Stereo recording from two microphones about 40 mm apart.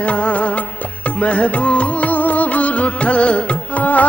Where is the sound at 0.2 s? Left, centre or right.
Left.